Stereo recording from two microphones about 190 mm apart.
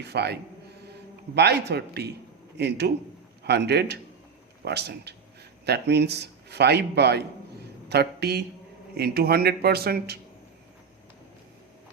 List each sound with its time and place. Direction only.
0.0 s a man's voice: 60° right (ahead or behind)
1.4 s a man's voice: 60° right (ahead or behind)